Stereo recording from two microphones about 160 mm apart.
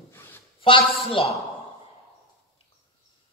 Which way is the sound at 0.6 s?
35° left (ahead or behind).